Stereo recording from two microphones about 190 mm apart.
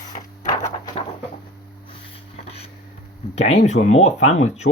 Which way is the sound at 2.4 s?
30° left (ahead or behind).